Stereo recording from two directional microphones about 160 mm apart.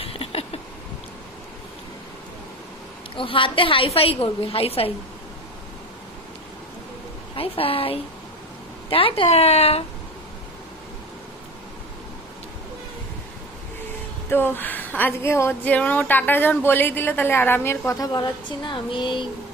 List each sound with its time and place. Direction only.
0.0 s a sound: 35° left (ahead or behind)
3.2 s a woman's voice: 35° left (ahead or behind)
7.3 s a woman's voice: 35° left (ahead or behind)
14.3 s speech: 10° left (ahead or behind); by 19.2 s 30° left (ahead or behind)